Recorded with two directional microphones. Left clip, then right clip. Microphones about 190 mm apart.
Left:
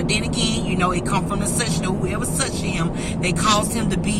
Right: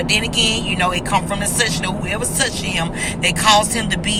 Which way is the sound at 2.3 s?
10° left (ahead or behind).